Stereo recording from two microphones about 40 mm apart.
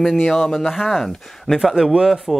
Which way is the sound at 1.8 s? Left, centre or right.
Centre.